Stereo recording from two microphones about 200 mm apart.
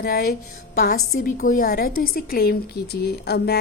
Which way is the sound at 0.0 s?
50° left (ahead or behind).